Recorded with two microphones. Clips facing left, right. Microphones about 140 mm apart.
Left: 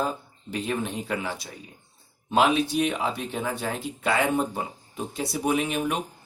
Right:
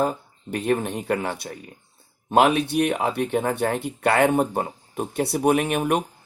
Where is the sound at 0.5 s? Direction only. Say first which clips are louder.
Right 5 dB; 55° right (ahead or behind).